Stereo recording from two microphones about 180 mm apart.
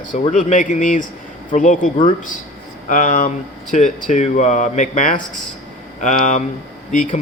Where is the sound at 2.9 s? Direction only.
45° left (ahead or behind).